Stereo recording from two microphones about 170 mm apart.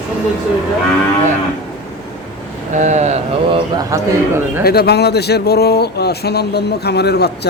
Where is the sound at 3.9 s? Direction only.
20° right (ahead or behind).